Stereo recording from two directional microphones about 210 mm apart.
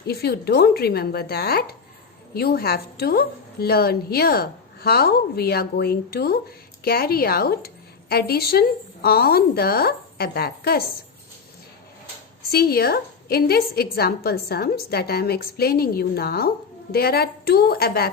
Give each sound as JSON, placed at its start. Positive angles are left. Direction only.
{"t": 0.1, "sound": "a woman's voice", "side_deg": 50}
{"t": 12.5, "sound": "a woman's voice", "side_deg": 45}